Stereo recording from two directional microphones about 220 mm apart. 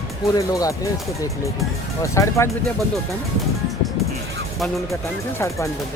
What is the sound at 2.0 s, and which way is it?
Speech, 15° left (ahead or behind).